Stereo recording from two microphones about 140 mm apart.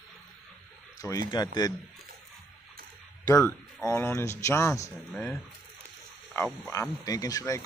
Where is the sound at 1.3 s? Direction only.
30° left (ahead or behind).